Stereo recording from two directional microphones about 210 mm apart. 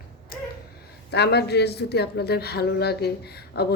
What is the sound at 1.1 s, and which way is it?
A woman's voice, 50° left (ahead or behind).